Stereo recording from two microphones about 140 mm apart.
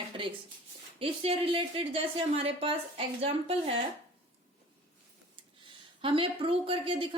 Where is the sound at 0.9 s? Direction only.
40° right (ahead or behind).